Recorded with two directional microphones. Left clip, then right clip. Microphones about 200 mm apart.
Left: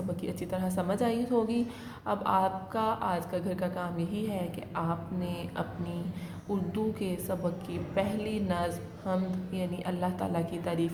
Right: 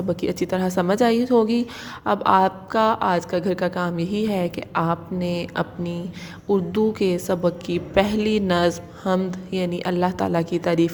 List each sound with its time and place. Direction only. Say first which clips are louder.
0.2 s a woman's voice: right 12 dB; 40° right (ahead or behind)